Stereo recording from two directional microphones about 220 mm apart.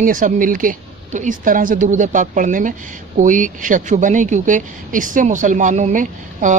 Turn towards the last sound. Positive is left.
turn(degrees=-35)  # may be behind; listen again after turning